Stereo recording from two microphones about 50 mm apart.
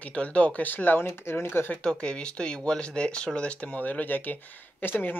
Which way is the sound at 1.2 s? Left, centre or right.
Left.